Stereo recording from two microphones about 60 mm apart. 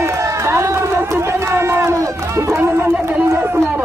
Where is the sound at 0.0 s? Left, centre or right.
Right.